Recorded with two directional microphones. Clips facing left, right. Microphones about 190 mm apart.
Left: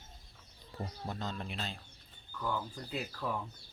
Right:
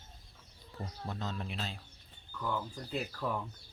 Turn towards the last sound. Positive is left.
turn(degrees=0)  # may be behind; listen again after turning